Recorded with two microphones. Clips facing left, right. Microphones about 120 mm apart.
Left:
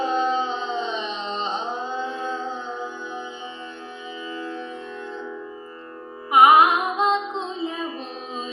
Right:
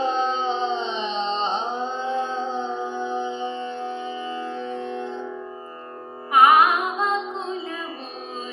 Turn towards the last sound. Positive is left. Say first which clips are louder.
# left 1 dB
turn(degrees=20)  # may be behind; listen again after turning